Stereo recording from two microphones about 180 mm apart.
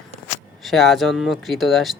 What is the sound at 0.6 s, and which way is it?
Speech, centre (ahead or behind).